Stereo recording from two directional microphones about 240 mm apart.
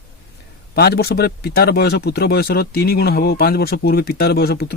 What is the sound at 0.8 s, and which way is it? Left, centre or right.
Speech, left.